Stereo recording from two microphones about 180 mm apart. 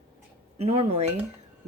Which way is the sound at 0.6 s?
35° right (ahead or behind).